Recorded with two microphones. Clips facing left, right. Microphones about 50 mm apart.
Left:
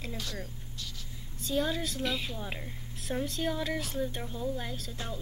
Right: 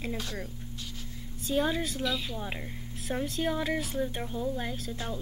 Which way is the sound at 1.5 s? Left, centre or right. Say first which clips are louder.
Right 2 dB; centre.